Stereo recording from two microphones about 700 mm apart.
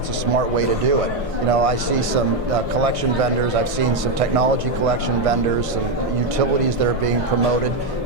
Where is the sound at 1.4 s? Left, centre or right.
Right.